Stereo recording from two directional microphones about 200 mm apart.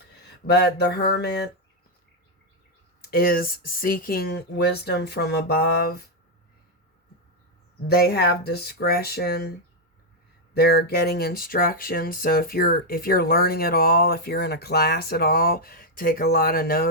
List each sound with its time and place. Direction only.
0.4 s speech: 55° left (ahead or behind)
3.1 s speech: 45° left (ahead or behind)
7.9 s speech: 50° left (ahead or behind)
10.5 s speech: 50° left (ahead or behind)